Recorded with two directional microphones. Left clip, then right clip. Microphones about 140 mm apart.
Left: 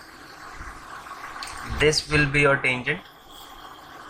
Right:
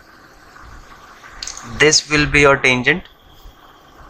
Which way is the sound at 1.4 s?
60° right (ahead or behind).